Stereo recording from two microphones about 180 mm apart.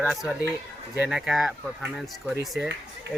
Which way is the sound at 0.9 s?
5° right (ahead or behind).